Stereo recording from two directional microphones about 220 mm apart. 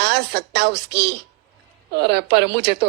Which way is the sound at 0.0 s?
50° right (ahead or behind).